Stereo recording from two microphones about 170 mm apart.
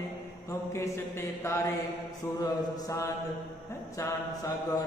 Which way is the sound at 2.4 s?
20° left (ahead or behind).